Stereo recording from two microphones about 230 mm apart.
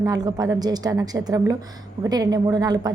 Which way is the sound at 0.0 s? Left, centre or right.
Centre.